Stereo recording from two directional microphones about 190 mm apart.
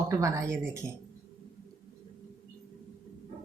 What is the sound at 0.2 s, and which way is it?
Speech, 15° right (ahead or behind).